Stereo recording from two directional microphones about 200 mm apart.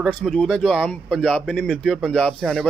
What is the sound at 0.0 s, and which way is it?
Speech, centre (ahead or behind).